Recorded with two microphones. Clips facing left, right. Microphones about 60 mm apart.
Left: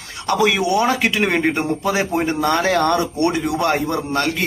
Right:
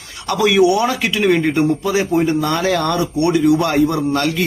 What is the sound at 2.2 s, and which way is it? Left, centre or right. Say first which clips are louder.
Speech: right 1 dB; left.